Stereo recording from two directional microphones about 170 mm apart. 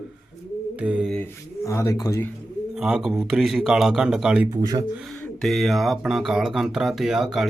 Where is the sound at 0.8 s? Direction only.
5° right (ahead or behind).